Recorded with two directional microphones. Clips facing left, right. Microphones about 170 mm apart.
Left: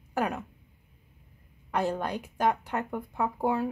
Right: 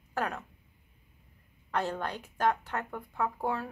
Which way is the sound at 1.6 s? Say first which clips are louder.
Left 3 dB; 15° left (ahead or behind).